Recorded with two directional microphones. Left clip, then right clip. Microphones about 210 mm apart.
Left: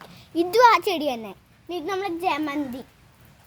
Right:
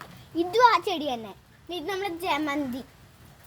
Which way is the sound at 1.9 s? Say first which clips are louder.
Left 3 dB; 30° left (ahead or behind).